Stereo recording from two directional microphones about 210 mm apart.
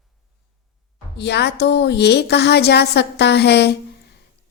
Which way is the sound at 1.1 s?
55° left (ahead or behind).